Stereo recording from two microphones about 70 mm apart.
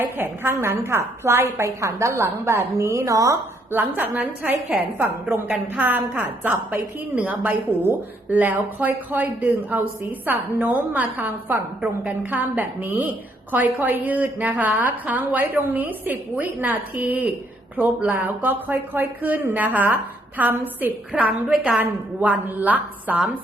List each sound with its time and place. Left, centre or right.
0.0 s a woman's voice: right
3.7 s a woman's voice: right